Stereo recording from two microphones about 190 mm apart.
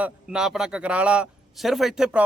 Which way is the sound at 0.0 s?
5° right (ahead or behind).